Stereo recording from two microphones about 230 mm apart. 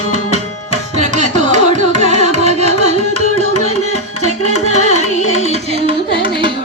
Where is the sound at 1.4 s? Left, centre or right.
Right.